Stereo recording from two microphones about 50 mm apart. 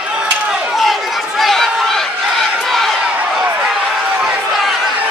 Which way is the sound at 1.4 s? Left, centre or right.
Centre.